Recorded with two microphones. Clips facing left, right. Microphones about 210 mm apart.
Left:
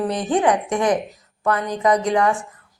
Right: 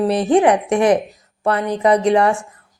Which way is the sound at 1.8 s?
30° right (ahead or behind).